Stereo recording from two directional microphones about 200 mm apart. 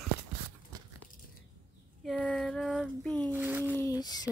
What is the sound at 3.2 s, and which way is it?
Speech, 10° right (ahead or behind).